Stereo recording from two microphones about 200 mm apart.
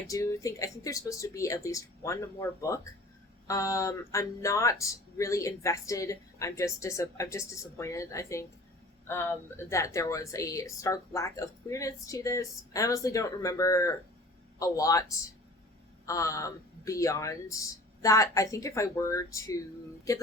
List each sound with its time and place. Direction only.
0.1 s speech: 15° left (ahead or behind)